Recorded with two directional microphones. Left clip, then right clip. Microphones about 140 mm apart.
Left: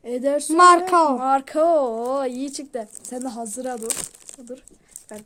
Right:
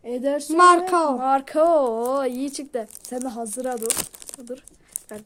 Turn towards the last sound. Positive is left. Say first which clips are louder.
# right 2 dB
turn(degrees=-15)  # may be behind; listen again after turning